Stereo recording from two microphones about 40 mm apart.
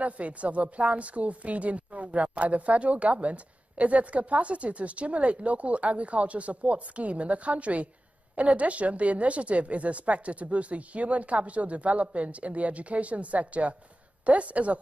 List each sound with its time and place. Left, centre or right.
0.0 s a woman's voice: right